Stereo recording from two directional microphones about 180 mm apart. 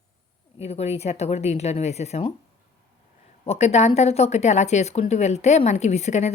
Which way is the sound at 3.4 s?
35° left (ahead or behind).